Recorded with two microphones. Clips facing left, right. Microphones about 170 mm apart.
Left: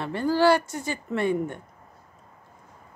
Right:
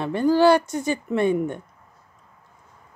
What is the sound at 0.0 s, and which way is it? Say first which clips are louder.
Speech: right 4 dB; 15° right (ahead or behind).